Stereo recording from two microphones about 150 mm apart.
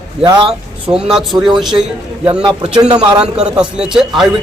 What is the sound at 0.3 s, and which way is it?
Speech, 30° right (ahead or behind).